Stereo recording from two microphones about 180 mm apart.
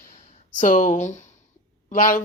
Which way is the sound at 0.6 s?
45° left (ahead or behind).